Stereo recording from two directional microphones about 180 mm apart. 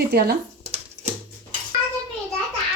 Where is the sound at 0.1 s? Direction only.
60° right (ahead or behind).